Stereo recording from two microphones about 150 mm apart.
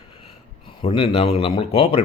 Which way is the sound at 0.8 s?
35° left (ahead or behind).